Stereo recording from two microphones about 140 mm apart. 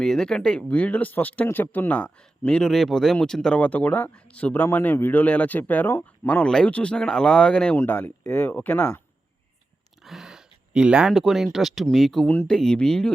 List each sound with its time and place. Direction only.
0.0 s speech: 5° left (ahead or behind)
10.0 s a sound: centre (ahead or behind)
11.5 s speech: centre (ahead or behind)